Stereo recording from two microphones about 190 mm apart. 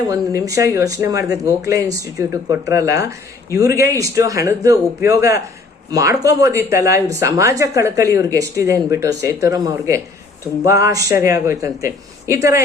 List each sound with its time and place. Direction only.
0.1 s speech: 15° right (ahead or behind)